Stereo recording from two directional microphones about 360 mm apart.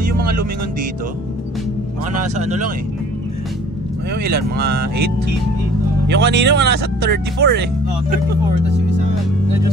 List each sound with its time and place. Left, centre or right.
2.3 s speech: centre
4.1 s speech: right
6.0 s speech: right